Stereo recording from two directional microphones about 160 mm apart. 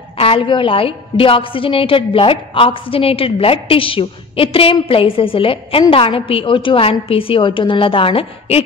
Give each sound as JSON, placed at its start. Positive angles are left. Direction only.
{"t": 0.2, "sound": "a woman's voice", "side_deg": 35}